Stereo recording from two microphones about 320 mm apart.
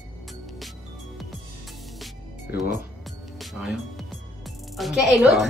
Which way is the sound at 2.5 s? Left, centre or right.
Left.